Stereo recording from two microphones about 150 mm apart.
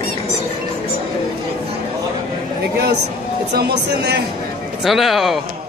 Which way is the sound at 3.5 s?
90° right.